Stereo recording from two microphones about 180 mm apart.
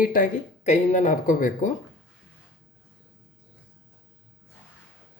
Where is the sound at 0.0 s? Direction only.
50° left (ahead or behind).